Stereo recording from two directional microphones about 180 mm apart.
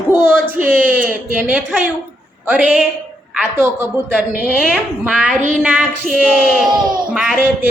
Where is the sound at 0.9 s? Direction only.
10° right (ahead or behind).